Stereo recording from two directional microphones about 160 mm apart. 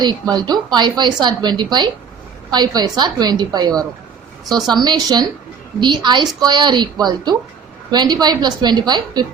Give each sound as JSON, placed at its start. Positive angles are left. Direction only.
{"t": 0.0, "sound": "a woman's voice", "side_deg": -25}